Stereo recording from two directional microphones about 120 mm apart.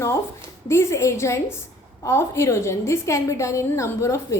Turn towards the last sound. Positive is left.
turn(degrees=25)  # may be behind; listen again after turning